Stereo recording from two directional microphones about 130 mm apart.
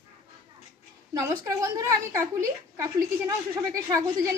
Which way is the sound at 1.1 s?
25° right (ahead or behind).